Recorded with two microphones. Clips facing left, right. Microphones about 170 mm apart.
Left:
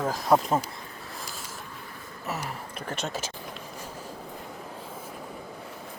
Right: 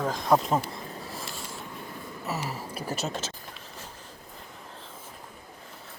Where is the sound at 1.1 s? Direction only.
Centre (ahead or behind).